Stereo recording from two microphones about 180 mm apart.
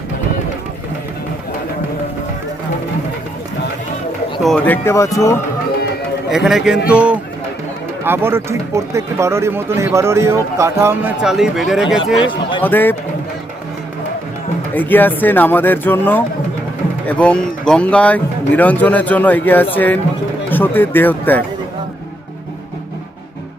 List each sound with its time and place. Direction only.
4.4 s speech: 5° left (ahead or behind)
6.3 s speech: centre (ahead or behind)
11.2 s speech: 5° right (ahead or behind)
12.2 s a sound: 25° left (ahead or behind)
12.6 s speech: 10° left (ahead or behind)
14.8 s speech: 10° left (ahead or behind)